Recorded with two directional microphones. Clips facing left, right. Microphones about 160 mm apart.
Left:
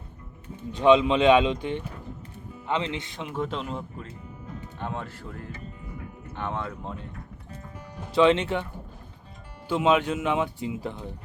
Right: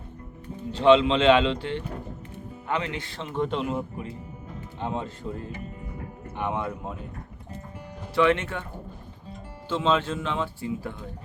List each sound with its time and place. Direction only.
0.8 s speech: 15° left (ahead or behind); by 4.0 s 5° right (ahead or behind)
4.8 s speech: 20° right (ahead or behind)
8.1 s speech: 20° left (ahead or behind)
9.6 s speech: 15° left (ahead or behind)